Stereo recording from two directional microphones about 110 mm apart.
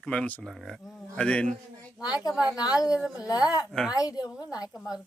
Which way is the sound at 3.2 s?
35° left (ahead or behind).